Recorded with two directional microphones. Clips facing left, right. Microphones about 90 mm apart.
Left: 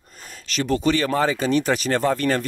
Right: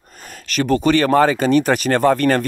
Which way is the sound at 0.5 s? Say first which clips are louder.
Right 5 dB; 55° right (ahead or behind).